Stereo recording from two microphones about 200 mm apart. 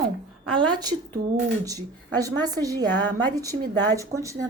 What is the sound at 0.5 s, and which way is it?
Speech, 20° right (ahead or behind).